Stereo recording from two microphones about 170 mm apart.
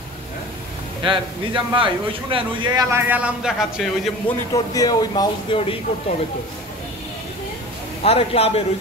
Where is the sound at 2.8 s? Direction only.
15° right (ahead or behind).